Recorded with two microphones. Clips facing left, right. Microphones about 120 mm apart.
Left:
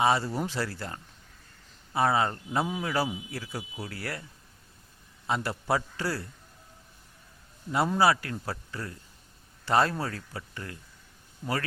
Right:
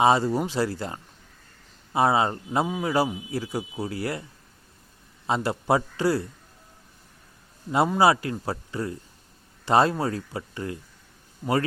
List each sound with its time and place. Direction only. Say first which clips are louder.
0.0 s speech: right 5 dB; 20° right (ahead or behind)
7.9 s speech: right 3 dB; 20° right (ahead or behind)
11.4 s a man's voice: right 6 dB; centre (ahead or behind)